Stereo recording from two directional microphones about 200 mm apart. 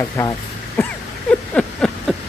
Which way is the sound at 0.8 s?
10° left (ahead or behind).